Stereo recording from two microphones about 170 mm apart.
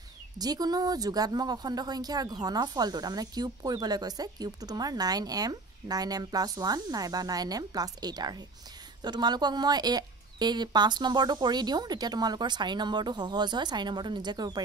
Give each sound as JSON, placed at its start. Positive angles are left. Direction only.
{"t": 0.4, "sound": "speech", "side_deg": -25}